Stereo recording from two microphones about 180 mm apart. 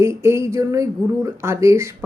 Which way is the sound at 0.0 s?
15° right (ahead or behind).